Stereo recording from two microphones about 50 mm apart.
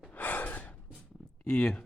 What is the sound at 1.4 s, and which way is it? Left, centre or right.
Speech, left.